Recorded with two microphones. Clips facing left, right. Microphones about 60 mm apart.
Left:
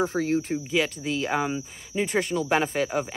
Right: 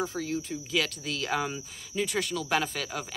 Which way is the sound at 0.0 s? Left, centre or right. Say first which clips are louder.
Left 7 dB; left.